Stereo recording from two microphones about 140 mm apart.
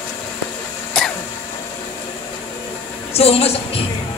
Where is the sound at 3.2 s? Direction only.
45° left (ahead or behind).